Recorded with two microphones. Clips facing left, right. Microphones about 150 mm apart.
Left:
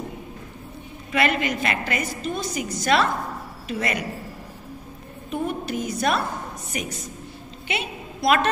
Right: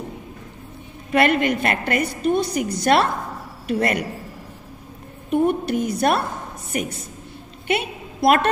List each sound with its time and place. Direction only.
1.1 s a woman's voice: 55° right (ahead or behind)
5.3 s a woman's voice: 55° right (ahead or behind)
7.6 s a sound: 55° right (ahead or behind)